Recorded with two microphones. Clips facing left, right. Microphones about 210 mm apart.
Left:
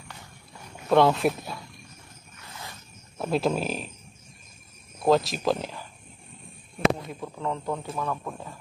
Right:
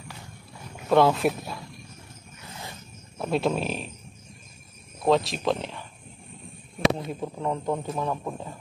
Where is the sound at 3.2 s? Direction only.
Centre (ahead or behind).